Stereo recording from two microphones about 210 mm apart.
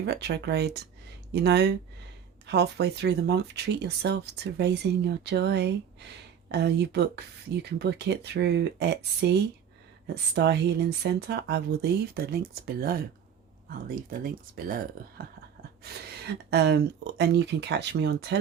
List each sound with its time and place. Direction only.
0.0 s speech: 50° right (ahead or behind)
10.3 s speech: 55° right (ahead or behind)
15.8 s speech: 50° right (ahead or behind)